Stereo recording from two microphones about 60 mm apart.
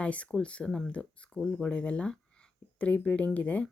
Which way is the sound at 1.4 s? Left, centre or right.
Centre.